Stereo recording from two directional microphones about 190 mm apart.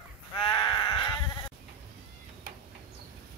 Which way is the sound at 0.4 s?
20° left (ahead or behind).